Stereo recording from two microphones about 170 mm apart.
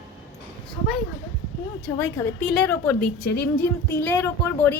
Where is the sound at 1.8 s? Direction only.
10° left (ahead or behind).